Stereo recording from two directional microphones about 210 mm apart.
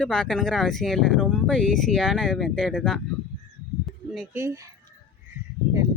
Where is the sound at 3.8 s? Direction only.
Centre (ahead or behind).